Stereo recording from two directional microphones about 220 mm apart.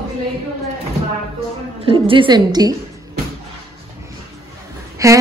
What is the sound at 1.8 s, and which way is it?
Speech, 25° right (ahead or behind).